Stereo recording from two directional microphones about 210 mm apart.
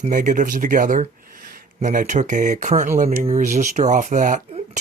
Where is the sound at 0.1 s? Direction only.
40° right (ahead or behind).